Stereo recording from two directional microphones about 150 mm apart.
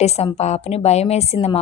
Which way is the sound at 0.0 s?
45° left (ahead or behind).